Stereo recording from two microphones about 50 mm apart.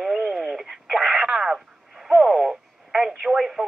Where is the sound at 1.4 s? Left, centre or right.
Centre.